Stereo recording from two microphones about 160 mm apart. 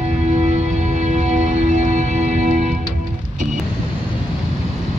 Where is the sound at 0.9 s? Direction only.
45° right (ahead or behind).